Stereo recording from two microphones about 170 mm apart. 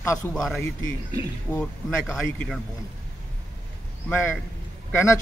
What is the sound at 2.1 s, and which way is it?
Speech, centre (ahead or behind).